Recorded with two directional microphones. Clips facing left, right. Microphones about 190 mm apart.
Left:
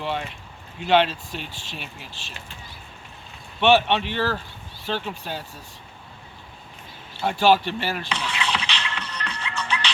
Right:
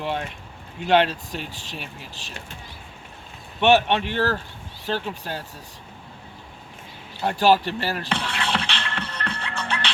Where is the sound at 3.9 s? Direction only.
50° right (ahead or behind).